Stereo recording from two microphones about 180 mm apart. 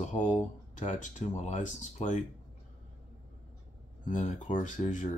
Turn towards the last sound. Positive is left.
turn(degrees=45)  # may be behind; listen again after turning